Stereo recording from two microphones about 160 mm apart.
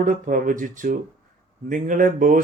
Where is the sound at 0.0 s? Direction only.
60° right (ahead or behind).